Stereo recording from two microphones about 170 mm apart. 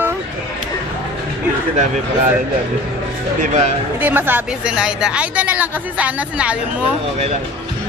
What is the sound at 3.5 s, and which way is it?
Speech, 40° right (ahead or behind).